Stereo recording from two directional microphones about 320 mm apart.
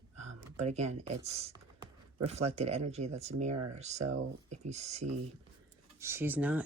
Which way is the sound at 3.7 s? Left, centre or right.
Right.